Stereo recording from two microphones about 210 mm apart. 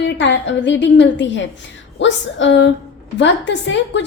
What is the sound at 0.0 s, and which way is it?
A woman's voice, 55° left (ahead or behind).